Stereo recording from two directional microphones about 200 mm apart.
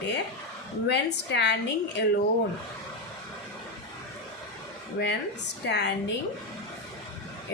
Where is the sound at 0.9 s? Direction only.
60° left (ahead or behind).